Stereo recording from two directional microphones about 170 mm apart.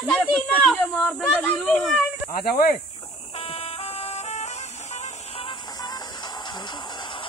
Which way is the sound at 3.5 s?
35° left (ahead or behind).